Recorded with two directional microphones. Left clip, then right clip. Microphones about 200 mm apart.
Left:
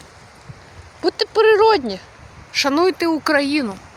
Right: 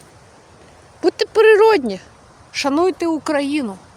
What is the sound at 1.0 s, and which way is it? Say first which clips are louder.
Speech: right 2 dB; 35° right (ahead or behind).